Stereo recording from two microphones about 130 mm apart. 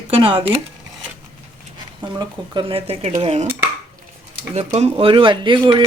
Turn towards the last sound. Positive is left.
turn(degrees=-40)  # may be behind; listen again after turning